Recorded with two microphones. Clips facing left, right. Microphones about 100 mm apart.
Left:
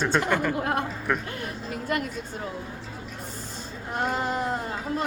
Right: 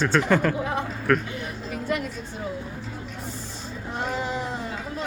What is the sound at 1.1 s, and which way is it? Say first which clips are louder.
Speech: right 6 dB; 15° left (ahead or behind).